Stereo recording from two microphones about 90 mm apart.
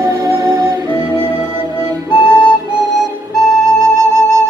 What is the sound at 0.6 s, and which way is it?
Music, 50° right (ahead or behind).